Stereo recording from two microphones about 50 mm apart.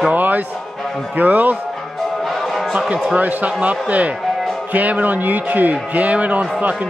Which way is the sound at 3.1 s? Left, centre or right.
Right.